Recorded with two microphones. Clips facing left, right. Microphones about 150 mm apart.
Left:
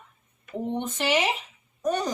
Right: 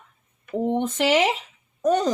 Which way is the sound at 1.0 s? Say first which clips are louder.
Right 4 dB; 90° right.